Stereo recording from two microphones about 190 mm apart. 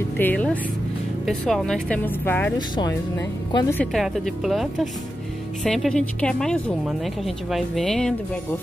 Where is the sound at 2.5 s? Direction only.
20° left (ahead or behind).